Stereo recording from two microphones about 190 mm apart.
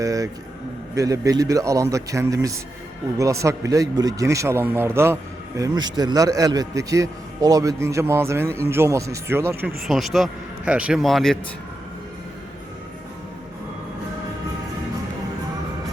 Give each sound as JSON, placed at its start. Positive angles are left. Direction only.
{"t": 0.0, "sound": "a sound", "side_deg": -20}
{"t": 0.9, "sound": "a man's voice", "side_deg": -15}
{"t": 9.8, "sound": "speech", "side_deg": 0}